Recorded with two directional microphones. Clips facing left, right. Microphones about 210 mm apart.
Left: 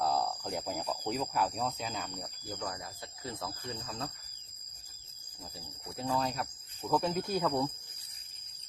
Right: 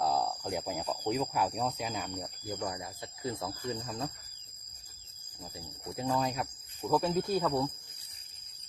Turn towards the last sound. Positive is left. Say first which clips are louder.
# right 1 dB
turn(degrees=0)  # may be behind; listen again after turning